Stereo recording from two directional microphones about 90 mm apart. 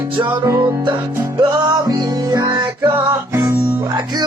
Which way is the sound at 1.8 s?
40° right (ahead or behind).